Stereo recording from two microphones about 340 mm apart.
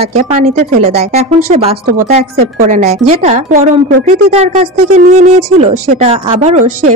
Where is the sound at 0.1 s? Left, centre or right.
Centre.